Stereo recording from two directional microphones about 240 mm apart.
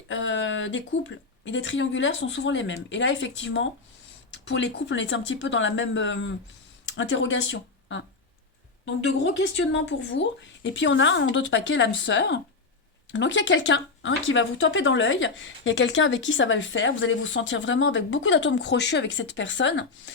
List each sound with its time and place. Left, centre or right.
0.1 s speech: left